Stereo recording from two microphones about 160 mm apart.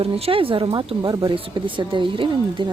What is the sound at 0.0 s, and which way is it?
Speech, 35° right (ahead or behind).